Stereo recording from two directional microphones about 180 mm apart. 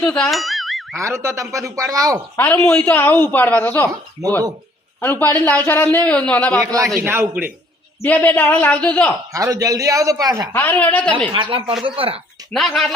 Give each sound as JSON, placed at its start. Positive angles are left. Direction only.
{"t": 0.0, "sound": "boing", "side_deg": 5}
{"t": 0.9, "sound": "speech", "side_deg": -15}
{"t": 2.3, "sound": "a man's voice", "side_deg": 10}
{"t": 4.9, "sound": "a man's voice", "side_deg": 10}
{"t": 6.6, "sound": "speech", "side_deg": -20}
{"t": 8.0, "sound": "a man's voice", "side_deg": 10}
{"t": 9.3, "sound": "speech", "side_deg": -20}
{"t": 10.5, "sound": "a man's voice", "side_deg": 10}
{"t": 11.3, "sound": "speech", "side_deg": -30}
{"t": 12.5, "sound": "speech", "side_deg": 0}